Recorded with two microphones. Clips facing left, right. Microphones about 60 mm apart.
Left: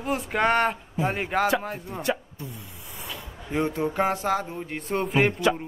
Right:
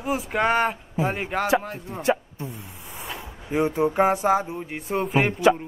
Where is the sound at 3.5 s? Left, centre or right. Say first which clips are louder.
Right 4 dB; centre.